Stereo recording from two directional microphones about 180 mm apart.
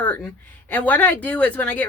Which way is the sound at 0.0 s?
10° left (ahead or behind).